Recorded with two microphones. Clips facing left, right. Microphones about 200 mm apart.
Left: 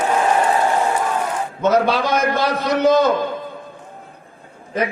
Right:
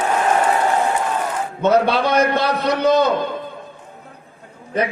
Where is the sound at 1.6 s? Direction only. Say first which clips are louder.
Right 1 dB; 60° right (ahead or behind).